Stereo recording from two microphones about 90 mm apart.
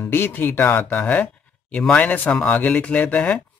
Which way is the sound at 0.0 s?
25° left (ahead or behind).